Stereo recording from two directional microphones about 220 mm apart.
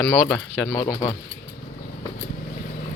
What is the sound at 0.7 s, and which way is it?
Speech, 20° left (ahead or behind).